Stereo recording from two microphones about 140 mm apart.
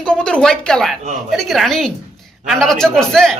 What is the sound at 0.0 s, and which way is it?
Speech, 5° left (ahead or behind).